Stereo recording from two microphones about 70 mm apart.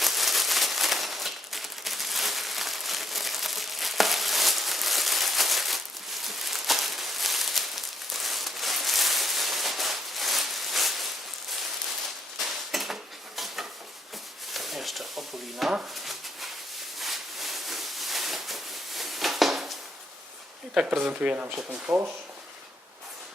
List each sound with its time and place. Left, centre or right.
0.0 s a sound: centre
20.7 s speech: centre
21.9 s speech: centre